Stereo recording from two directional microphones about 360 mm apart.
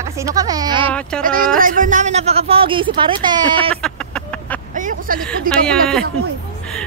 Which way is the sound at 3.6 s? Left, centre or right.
Centre.